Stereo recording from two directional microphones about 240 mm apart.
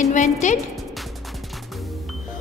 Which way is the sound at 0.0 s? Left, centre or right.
Left.